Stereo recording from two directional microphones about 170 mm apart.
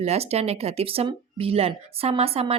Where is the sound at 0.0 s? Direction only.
40° right (ahead or behind).